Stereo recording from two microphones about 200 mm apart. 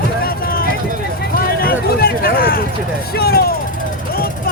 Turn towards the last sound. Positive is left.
turn(degrees=50)  # may be behind; listen again after turning